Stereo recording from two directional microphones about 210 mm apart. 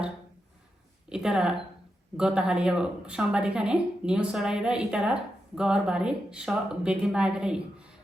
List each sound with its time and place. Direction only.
1.1 s a woman's voice: 5° right (ahead or behind)